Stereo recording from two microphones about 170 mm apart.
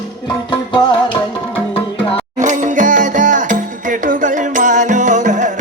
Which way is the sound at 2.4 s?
45° right (ahead or behind).